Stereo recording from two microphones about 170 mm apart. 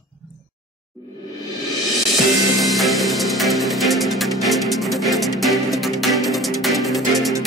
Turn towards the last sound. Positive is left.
turn(degrees=0)  # may be behind; listen again after turning